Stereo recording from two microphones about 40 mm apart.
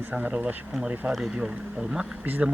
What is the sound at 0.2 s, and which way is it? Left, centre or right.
Speech, right.